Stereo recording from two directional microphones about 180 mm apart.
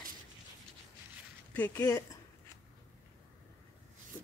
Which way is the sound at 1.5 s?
10° left (ahead or behind).